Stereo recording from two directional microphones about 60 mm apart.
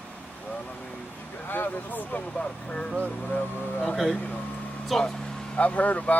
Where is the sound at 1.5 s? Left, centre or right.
Left.